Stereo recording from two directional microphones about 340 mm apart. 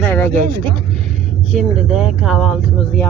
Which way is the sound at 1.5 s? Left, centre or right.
Centre.